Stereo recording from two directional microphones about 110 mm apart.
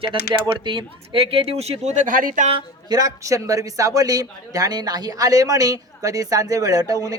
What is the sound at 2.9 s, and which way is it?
Speech, 30° right (ahead or behind).